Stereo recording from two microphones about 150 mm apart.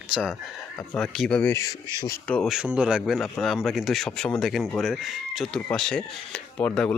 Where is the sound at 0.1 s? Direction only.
5° right (ahead or behind).